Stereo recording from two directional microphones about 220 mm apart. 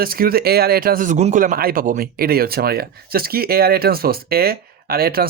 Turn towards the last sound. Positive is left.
turn(degrees=-45)  # may be behind; listen again after turning